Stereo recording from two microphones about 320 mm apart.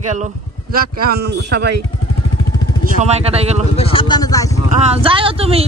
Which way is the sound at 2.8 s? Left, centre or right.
Centre.